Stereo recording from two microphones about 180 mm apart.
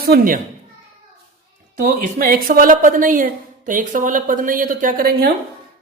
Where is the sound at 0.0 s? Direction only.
60° right (ahead or behind).